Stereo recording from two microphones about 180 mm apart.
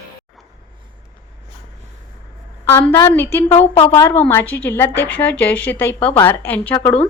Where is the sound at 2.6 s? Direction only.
15° left (ahead or behind).